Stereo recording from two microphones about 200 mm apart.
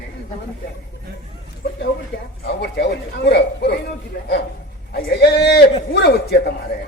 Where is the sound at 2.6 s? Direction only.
55° left (ahead or behind).